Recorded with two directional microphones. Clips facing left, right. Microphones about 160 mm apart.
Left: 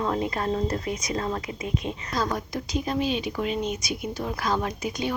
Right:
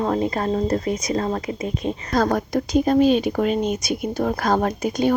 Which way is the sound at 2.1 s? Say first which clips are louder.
Right 9 dB; 55° right (ahead or behind).